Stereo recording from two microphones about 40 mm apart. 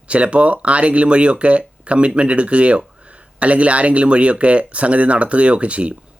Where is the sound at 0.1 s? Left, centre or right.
Right.